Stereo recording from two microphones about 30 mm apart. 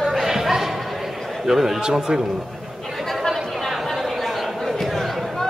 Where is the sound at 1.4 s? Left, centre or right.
Centre.